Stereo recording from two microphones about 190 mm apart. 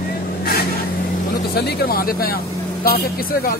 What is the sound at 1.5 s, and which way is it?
Speech, 55° left (ahead or behind).